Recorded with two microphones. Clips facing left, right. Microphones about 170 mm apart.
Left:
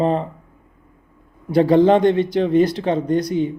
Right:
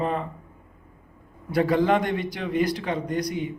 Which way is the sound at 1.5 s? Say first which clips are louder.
Left 8 dB; 25° left (ahead or behind).